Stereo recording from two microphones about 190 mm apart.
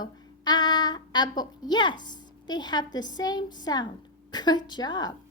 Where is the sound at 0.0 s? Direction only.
20° left (ahead or behind).